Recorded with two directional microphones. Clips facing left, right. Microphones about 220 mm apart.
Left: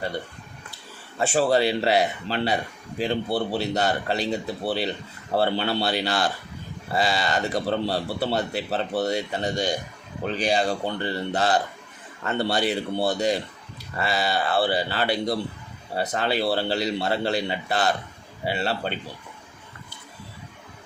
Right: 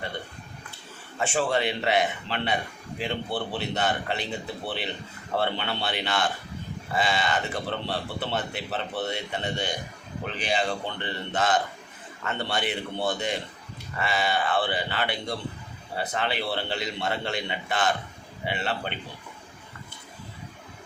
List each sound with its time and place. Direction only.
1.2 s a man's voice: 40° left (ahead or behind)